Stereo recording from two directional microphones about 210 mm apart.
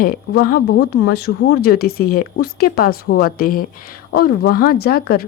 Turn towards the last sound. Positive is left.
turn(degrees=45)  # may be behind; listen again after turning